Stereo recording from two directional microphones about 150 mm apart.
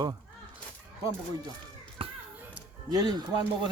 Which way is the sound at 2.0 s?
35° right (ahead or behind).